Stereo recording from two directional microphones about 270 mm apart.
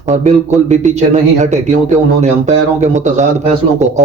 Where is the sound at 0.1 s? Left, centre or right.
Right.